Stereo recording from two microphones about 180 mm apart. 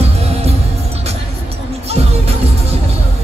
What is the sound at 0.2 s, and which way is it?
Music, 35° right (ahead or behind).